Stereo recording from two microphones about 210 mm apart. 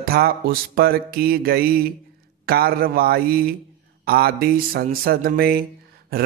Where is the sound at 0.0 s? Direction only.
45° right (ahead or behind).